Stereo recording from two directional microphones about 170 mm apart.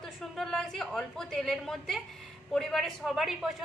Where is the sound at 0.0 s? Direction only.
Centre (ahead or behind).